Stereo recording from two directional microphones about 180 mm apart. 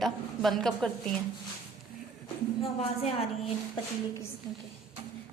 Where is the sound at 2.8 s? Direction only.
35° left (ahead or behind).